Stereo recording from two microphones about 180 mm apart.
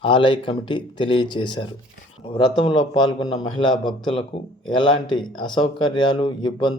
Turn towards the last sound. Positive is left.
turn(degrees=25)  # may be behind; listen again after turning